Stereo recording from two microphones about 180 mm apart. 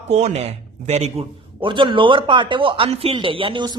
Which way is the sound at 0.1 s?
35° right (ahead or behind).